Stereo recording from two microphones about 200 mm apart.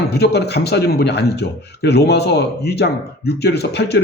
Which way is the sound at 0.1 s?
55° left (ahead or behind).